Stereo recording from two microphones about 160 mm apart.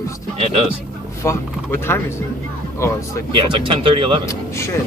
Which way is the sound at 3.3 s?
30° right (ahead or behind).